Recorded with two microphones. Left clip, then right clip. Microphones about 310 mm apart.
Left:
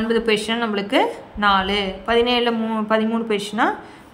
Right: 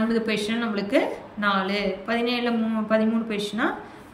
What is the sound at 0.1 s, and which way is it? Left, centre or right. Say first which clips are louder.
A woman's voice: left 6 dB; centre.